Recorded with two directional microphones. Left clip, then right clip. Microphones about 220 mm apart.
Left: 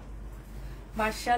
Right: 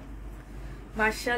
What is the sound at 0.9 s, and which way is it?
Speech, 35° right (ahead or behind).